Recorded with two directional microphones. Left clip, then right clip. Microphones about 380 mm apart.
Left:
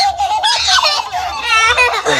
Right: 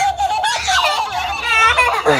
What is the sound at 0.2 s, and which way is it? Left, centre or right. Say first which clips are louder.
Baby laughter: left 3 dB; centre.